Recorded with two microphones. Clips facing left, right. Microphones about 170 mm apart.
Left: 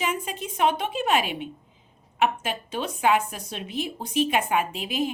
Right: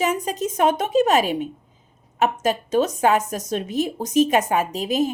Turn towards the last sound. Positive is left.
turn(degrees=-40)  # may be behind; listen again after turning